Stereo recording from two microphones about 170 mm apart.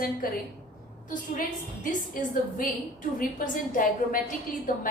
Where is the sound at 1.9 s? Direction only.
50° left (ahead or behind).